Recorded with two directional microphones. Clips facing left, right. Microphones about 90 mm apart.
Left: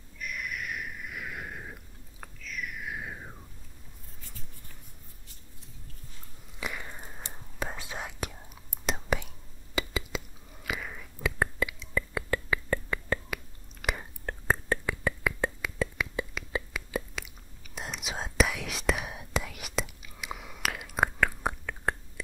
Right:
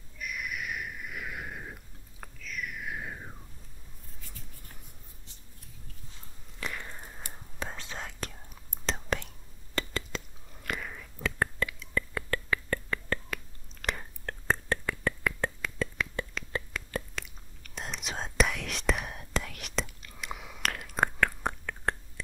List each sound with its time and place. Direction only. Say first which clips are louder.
0.2 s a sound: even; 5° right (ahead or behind)
6.6 s biting: left 1 dB; 5° left (ahead or behind)
7.5 s whispering: left 2 dB; 10° left (ahead or behind)
9.8 s chewing: left 2 dB; 5° left (ahead or behind)
11.9 s whispering: left 2 dB; 10° left (ahead or behind)